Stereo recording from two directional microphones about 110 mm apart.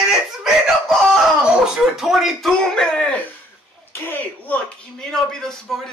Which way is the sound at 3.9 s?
15° left (ahead or behind).